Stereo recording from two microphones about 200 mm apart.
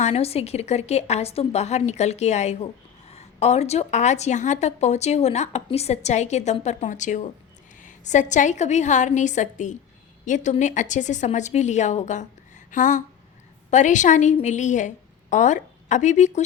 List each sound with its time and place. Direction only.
0.0 s a woman's voice: 30° left (ahead or behind)